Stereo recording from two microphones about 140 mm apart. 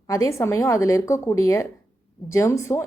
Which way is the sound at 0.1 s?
20° left (ahead or behind).